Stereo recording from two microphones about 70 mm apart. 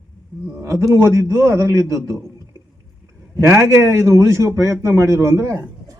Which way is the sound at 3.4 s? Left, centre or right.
Right.